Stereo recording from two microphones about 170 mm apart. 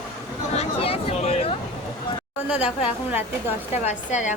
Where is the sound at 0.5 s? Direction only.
35° left (ahead or behind).